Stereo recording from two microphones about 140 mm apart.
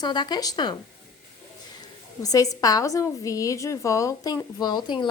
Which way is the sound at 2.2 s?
25° left (ahead or behind).